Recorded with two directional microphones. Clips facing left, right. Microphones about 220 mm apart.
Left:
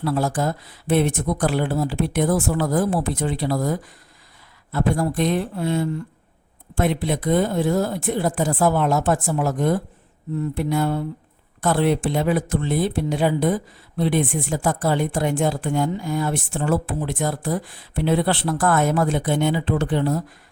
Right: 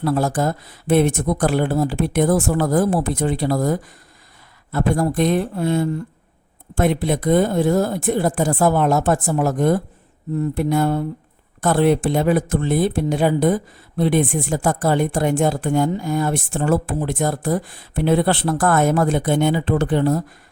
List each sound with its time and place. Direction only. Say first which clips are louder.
0.0 s speech: right 3 dB; 45° right (ahead or behind)